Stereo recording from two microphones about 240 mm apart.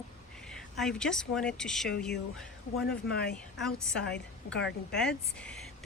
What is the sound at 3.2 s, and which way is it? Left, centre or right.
Speech, left.